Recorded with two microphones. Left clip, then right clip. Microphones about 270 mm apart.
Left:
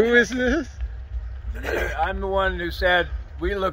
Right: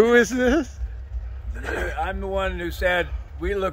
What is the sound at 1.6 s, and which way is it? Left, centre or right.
Speech, left.